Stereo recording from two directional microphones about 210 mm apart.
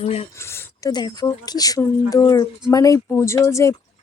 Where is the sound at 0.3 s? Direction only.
10° left (ahead or behind).